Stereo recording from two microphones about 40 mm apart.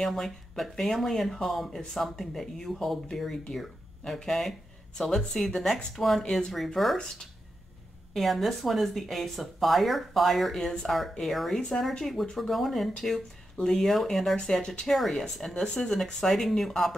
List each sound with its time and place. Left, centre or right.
0.0 s speech: centre
4.1 s speech: centre
5.9 s speech: centre
8.1 s speech: centre
14.3 s speech: centre
14.9 s speech: centre
15.5 s speech: centre
15.9 s speech: centre